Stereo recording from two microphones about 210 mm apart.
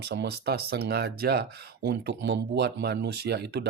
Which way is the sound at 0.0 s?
50° right (ahead or behind).